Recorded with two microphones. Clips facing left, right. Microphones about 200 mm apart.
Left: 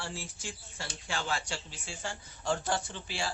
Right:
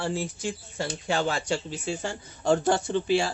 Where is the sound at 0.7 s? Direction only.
55° right (ahead or behind).